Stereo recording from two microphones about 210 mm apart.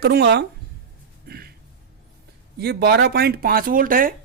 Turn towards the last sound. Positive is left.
turn(degrees=-40)  # may be behind; listen again after turning